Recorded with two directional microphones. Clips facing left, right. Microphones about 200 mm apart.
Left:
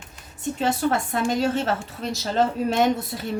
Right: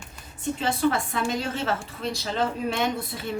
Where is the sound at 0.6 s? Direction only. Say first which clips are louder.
Left 2 dB; 45° left (ahead or behind).